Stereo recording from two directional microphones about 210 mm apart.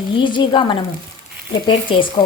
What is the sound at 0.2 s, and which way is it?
Speech, 20° left (ahead or behind).